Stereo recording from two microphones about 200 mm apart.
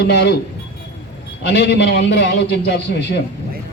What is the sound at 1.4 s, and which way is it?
A man's voice, 60° left (ahead or behind).